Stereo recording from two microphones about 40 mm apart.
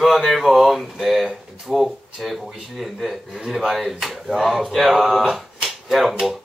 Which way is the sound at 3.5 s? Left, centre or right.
Centre.